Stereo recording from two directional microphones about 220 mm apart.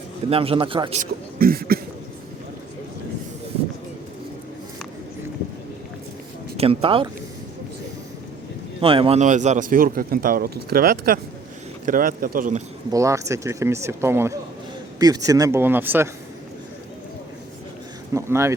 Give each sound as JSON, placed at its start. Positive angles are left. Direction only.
{"t": 0.3, "sound": "a man's voice", "side_deg": -25}
{"t": 1.4, "sound": "cough", "side_deg": -40}
{"t": 6.6, "sound": "a man's voice", "side_deg": -25}
{"t": 8.8, "sound": "speech", "side_deg": -25}
{"t": 12.9, "sound": "speech", "side_deg": -15}
{"t": 18.1, "sound": "speech", "side_deg": -10}